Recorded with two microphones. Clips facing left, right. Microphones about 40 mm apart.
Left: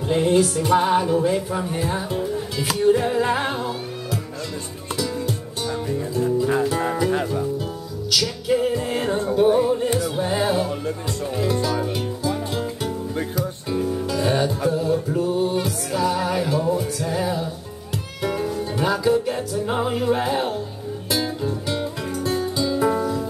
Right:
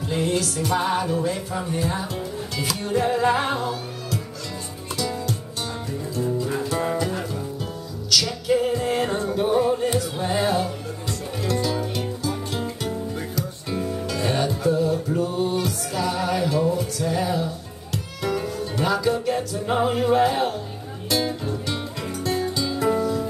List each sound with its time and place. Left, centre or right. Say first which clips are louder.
0.1 s music: left 6 dB; left
0.7 s music: left 5 dB; centre
1.7 s speech: left 1 dB; centre
2.8 s music: left 3 dB; centre
6.2 s speech: left 3 dB; centre
8.1 s music: even; centre
13.7 s music: left 3 dB; centre